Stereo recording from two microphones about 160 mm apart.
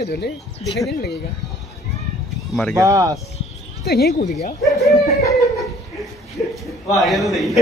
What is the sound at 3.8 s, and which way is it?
Speech, 90° left.